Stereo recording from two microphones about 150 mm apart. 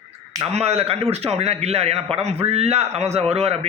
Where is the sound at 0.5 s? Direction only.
45° right (ahead or behind).